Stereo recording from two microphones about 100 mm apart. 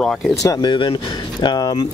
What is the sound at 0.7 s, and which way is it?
Speech, 55° left (ahead or behind).